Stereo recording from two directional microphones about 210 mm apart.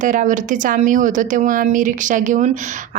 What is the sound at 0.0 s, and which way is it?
Speech, 35° right (ahead or behind).